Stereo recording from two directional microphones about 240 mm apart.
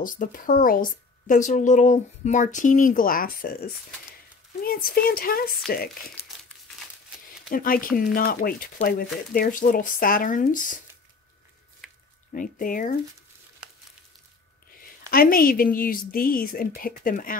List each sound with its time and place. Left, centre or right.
0.0 s speech: left
7.4 s speech: left
11.8 s squish: centre
12.3 s speech: left
15.0 s speech: left